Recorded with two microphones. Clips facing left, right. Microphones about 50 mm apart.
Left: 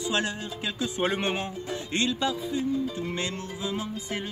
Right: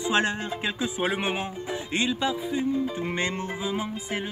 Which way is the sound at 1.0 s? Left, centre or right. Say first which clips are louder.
Left 2 dB; centre.